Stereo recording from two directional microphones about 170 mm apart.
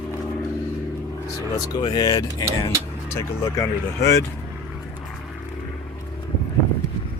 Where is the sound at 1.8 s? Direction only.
25° left (ahead or behind).